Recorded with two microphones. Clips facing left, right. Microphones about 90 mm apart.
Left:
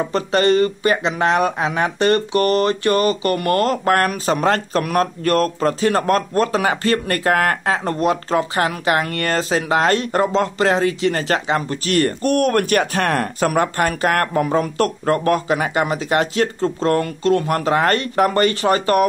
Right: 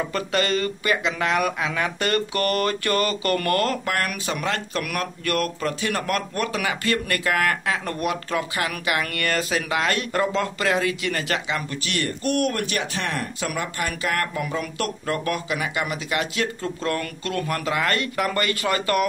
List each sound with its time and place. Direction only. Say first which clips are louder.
0.0 s speech: left 7 dB; 30° left (ahead or behind)